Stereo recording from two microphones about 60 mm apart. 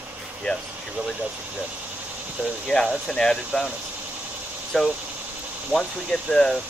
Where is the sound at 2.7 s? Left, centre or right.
Left.